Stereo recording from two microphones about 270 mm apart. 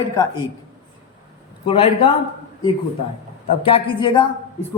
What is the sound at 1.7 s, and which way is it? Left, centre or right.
Speech, centre.